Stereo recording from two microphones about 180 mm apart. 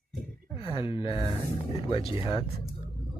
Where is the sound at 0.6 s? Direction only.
30° left (ahead or behind).